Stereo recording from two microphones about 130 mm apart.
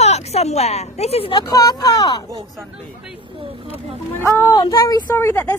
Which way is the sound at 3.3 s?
45° right (ahead or behind).